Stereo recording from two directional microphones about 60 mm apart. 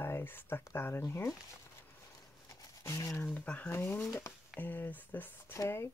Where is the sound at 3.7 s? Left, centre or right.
Left.